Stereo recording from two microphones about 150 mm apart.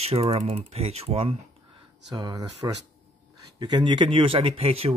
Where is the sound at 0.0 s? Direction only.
45° right (ahead or behind).